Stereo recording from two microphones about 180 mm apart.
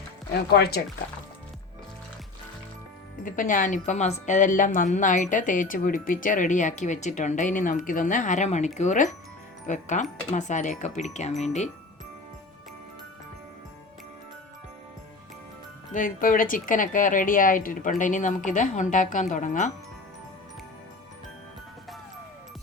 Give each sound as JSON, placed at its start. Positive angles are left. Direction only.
{"t": 0.5, "sound": "speech", "side_deg": 65}
{"t": 3.2, "sound": "a woman's voice", "side_deg": 45}
{"t": 15.9, "sound": "a woman's voice", "side_deg": 50}